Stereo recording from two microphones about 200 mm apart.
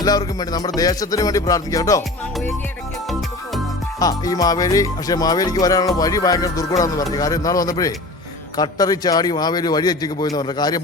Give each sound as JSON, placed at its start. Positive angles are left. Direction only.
{"t": 0.0, "sound": "a man's voice", "side_deg": 20}
{"t": 0.8, "sound": "music", "side_deg": 20}
{"t": 4.0, "sound": "music", "side_deg": 20}
{"t": 8.5, "sound": "a man's voice", "side_deg": 20}